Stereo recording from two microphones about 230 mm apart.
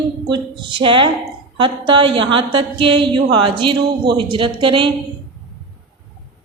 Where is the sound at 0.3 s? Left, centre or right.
Right.